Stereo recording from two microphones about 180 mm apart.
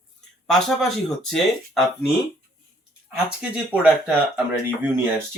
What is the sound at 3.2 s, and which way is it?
Speech, 10° right (ahead or behind).